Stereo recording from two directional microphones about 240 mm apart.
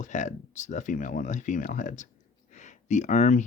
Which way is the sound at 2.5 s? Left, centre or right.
Left.